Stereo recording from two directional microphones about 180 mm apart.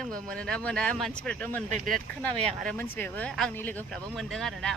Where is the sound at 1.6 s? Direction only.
45° right (ahead or behind).